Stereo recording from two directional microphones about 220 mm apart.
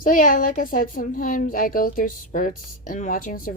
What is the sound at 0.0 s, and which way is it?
Speech, 35° left (ahead or behind).